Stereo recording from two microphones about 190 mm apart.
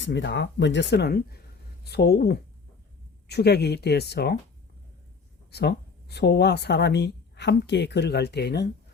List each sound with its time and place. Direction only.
0.0 s speech: 70° left (ahead or behind)
5.5 s speech: 60° left (ahead or behind)